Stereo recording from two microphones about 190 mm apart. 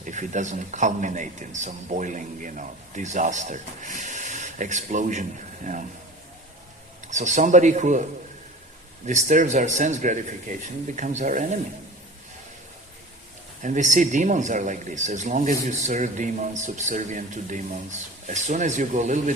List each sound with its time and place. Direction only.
0.0 s a man's voice: 40° right (ahead or behind)
7.1 s a man's voice: 40° right (ahead or behind)
9.0 s a man's voice: 40° right (ahead or behind)
13.6 s a man's voice: 40° right (ahead or behind)